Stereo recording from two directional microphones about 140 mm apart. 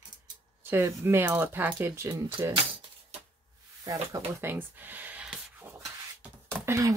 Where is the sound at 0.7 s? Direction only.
15° right (ahead or behind).